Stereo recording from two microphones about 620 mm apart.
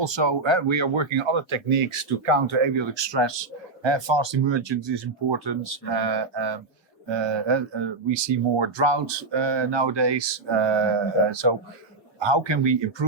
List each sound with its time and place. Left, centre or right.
0.0 s speech: right